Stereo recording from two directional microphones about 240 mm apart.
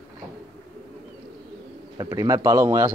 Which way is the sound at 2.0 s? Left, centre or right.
Centre.